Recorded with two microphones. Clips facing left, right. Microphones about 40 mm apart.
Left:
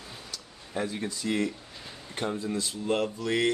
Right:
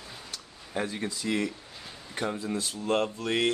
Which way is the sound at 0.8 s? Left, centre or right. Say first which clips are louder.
Even; right.